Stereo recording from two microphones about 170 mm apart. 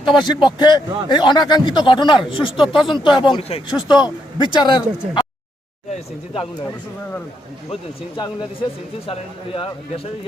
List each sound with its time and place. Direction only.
0.0 s speech: 25° left (ahead or behind)
7.7 s speech: 30° left (ahead or behind)